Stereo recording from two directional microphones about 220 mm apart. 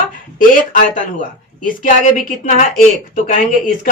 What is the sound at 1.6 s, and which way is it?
Speech, 40° left (ahead or behind).